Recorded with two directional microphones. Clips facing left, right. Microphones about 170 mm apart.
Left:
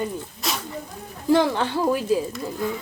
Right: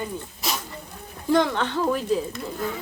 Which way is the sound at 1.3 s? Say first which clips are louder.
Left 2 dB; 5° left (ahead or behind).